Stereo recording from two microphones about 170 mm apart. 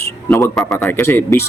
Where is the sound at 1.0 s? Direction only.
10° left (ahead or behind).